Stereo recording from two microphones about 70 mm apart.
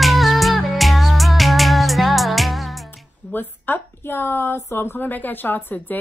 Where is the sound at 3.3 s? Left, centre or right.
Left.